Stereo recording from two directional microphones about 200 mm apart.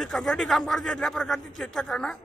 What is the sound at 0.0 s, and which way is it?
A man's voice, centre (ahead or behind).